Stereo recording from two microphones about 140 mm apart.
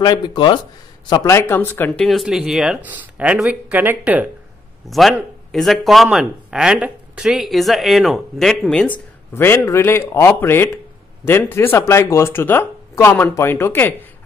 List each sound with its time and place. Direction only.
0.0 s speech: 30° left (ahead or behind)
1.2 s speech: 20° left (ahead or behind)
2.0 s speech: centre (ahead or behind)
4.8 s speech: centre (ahead or behind)